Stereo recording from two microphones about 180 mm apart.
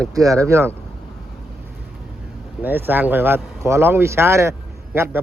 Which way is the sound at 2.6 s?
10° right (ahead or behind).